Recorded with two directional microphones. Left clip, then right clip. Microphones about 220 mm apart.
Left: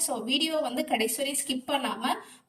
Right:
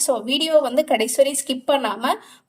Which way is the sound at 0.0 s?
25° right (ahead or behind).